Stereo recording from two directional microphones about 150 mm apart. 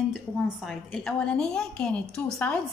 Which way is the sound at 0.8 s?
5° left (ahead or behind).